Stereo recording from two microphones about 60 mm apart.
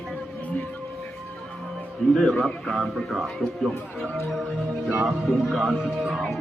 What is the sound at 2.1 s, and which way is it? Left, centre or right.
A man's voice, centre.